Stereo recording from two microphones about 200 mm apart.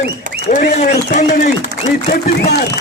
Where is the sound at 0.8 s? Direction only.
50° left (ahead or behind).